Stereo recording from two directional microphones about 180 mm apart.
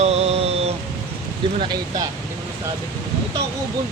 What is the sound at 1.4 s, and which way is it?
Speech, 30° right (ahead or behind).